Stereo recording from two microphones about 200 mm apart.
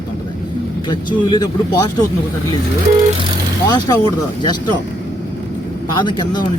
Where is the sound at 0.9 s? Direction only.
25° left (ahead or behind).